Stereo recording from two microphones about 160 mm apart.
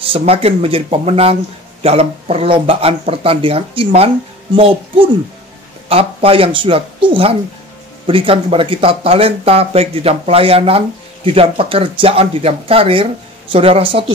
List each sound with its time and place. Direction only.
0.0 s a man's voice: 35° right (ahead or behind)